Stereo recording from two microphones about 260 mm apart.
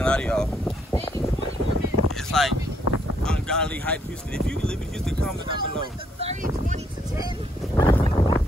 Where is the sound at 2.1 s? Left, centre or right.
Centre.